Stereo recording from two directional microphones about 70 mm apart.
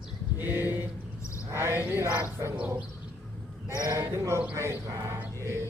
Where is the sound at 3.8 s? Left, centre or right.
Right.